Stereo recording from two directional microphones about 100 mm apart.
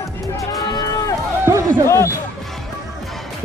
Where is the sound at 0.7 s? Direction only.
45° left (ahead or behind).